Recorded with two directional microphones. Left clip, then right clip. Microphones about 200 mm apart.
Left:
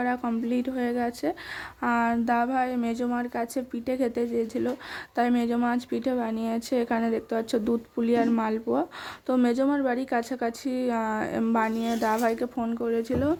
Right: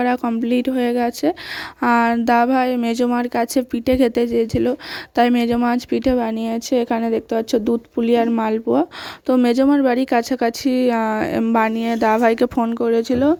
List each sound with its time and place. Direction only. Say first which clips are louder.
0.0 s a woman's voice: right 9 dB; 45° right (ahead or behind)